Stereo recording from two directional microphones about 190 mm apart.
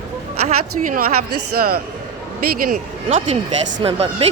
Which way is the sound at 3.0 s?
40° right (ahead or behind).